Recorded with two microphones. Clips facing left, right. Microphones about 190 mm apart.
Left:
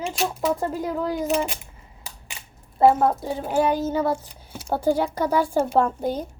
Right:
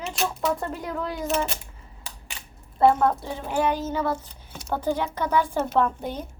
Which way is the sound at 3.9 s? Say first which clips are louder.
Left 3 dB; 40° left (ahead or behind).